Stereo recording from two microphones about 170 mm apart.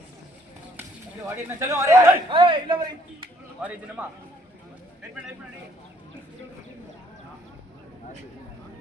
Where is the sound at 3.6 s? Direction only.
5° right (ahead or behind).